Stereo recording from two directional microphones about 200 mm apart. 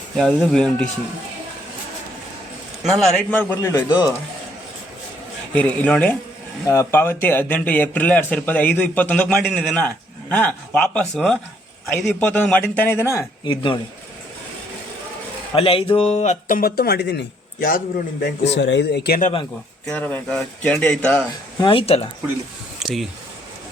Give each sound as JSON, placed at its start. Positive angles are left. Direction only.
{"t": 0.2, "sound": "speech", "side_deg": 0}
{"t": 2.9, "sound": "a man's voice", "side_deg": 0}
{"t": 5.5, "sound": "a man's voice", "side_deg": 5}
{"t": 15.5, "sound": "speech", "side_deg": 25}
{"t": 18.2, "sound": "a man's voice", "side_deg": 60}
{"t": 19.8, "sound": "speech", "side_deg": 5}
{"t": 21.6, "sound": "speech", "side_deg": 25}
{"t": 22.8, "sound": "speech", "side_deg": 0}